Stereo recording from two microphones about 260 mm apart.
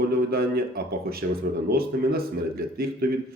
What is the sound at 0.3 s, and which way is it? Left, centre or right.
Speech, right.